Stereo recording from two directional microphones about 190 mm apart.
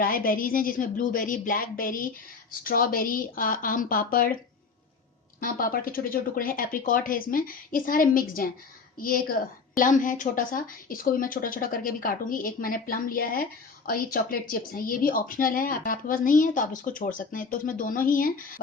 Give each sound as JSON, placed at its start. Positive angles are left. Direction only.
{"t": 0.0, "sound": "a woman's voice", "side_deg": 50}
{"t": 5.4, "sound": "a woman's voice", "side_deg": 50}